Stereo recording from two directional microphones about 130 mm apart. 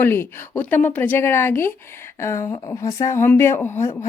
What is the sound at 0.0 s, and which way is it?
A woman's voice, 20° left (ahead or behind).